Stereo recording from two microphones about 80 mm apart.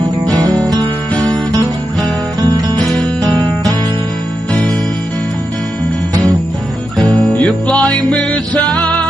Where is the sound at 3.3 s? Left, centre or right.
Right.